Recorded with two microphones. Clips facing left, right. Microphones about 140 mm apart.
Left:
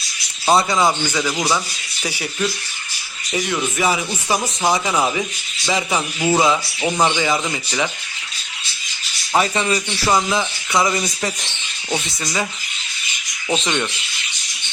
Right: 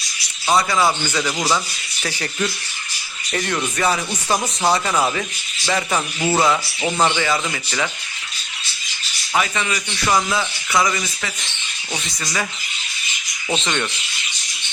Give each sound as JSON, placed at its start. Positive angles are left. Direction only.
{"t": 0.4, "sound": "speech", "side_deg": 25}
{"t": 9.3, "sound": "speech", "side_deg": 30}
{"t": 10.2, "sound": "speech", "side_deg": 15}
{"t": 12.2, "sound": "speech", "side_deg": 20}
{"t": 13.5, "sound": "speech", "side_deg": 10}